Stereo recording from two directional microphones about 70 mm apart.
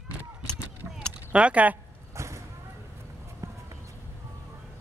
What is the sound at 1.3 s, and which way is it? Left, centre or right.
Speech, centre.